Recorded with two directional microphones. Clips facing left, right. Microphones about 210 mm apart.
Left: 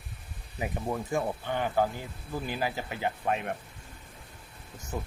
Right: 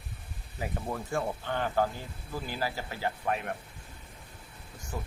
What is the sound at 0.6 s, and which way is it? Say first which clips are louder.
Speech: left 3 dB; 20° left (ahead or behind).